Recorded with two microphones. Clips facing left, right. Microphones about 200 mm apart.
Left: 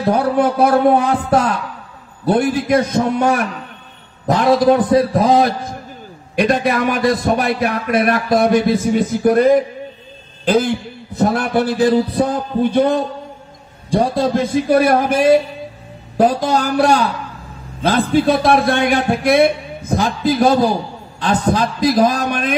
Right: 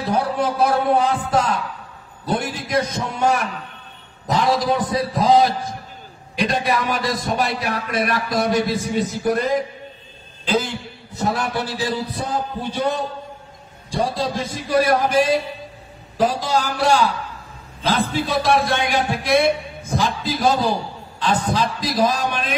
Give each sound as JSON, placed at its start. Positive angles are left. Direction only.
{"t": 0.0, "sound": "a man's voice", "side_deg": 55}